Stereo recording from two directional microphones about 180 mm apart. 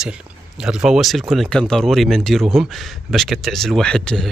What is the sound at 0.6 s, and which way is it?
Speech, 5° right (ahead or behind).